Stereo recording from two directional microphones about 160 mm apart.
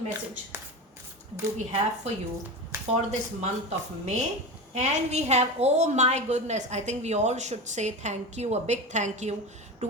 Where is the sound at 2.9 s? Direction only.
45° right (ahead or behind).